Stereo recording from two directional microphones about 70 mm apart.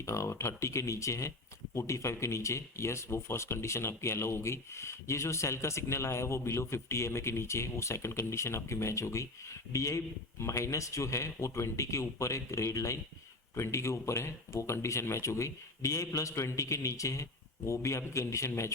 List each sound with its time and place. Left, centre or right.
0.0 s speech: left